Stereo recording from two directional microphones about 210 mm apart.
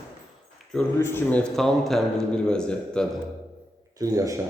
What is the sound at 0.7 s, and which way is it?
A man's voice, 10° left (ahead or behind).